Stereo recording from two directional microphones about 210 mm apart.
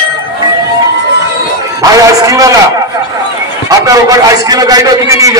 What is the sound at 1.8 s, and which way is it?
Speech, 15° right (ahead or behind).